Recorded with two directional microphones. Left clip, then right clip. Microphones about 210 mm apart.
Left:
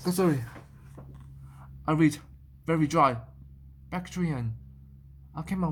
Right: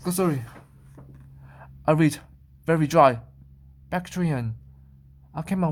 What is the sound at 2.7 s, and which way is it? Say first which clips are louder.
Speech: right 6 dB; 35° right (ahead or behind).